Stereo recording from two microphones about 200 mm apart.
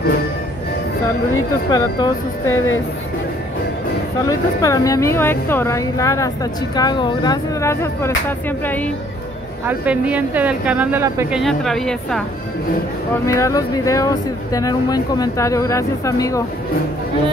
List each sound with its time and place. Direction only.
1.7 s speech: 20° left (ahead or behind)
4.3 s a woman's voice: 15° left (ahead or behind)
9.7 s a woman's voice: 5° right (ahead or behind)
11.3 s a woman's voice: centre (ahead or behind)
13.3 s a woman's voice: 15° left (ahead or behind)